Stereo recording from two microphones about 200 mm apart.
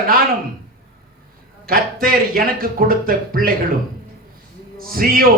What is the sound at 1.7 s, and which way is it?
Speech, 45° right (ahead or behind).